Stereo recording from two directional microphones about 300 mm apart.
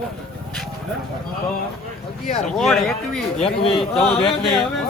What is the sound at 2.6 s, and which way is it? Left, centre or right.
Speech, centre.